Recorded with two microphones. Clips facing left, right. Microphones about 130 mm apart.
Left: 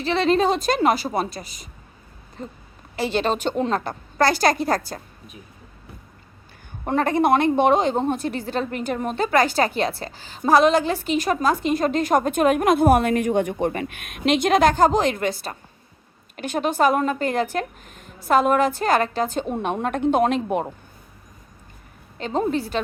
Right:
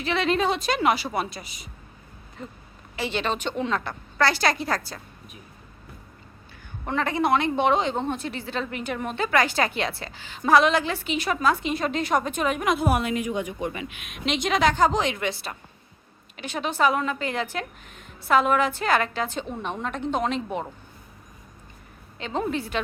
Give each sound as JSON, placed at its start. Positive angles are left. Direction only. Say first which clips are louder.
{"t": 0.0, "sound": "a woman's voice", "louder": "left 4 dB", "side_deg": 35}
{"t": 6.8, "sound": "a woman's voice", "louder": "left 5 dB", "side_deg": 45}
{"t": 22.2, "sound": "a woman's voice", "louder": "left 5 dB", "side_deg": 40}